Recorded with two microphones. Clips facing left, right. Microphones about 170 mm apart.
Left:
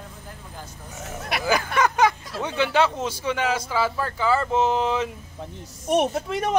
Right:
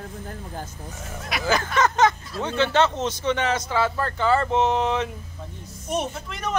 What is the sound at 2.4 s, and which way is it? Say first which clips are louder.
Speech: right 1 dB; 15° left (ahead or behind).